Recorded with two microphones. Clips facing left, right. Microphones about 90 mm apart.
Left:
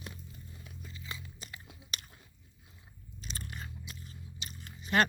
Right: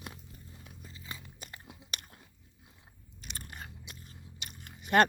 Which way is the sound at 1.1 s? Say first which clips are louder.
Left 1 dB; 45° right (ahead or behind).